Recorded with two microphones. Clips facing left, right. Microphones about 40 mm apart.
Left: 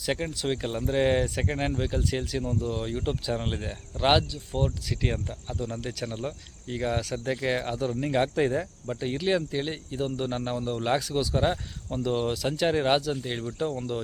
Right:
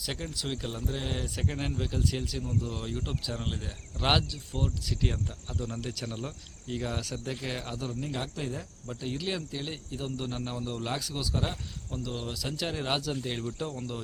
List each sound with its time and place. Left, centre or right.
0.0 s speech: left
1.5 s speech: centre
8.0 s speech: left
8.9 s speech: left
13.2 s speech: centre